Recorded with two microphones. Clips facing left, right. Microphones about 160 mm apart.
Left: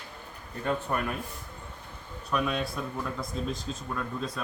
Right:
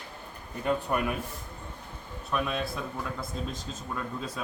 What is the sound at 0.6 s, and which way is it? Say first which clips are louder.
Speech: right 2 dB; 15° right (ahead or behind).